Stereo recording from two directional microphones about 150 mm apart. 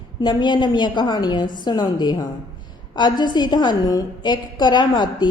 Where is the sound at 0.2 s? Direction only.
30° left (ahead or behind).